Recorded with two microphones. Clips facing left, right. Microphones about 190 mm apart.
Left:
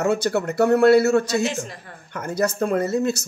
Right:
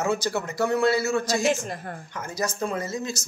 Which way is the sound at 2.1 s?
60° left (ahead or behind).